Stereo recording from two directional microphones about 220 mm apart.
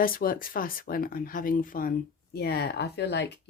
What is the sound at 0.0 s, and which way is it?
Speech, 40° left (ahead or behind).